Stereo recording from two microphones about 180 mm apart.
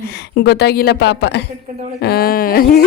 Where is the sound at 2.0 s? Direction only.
55° left (ahead or behind).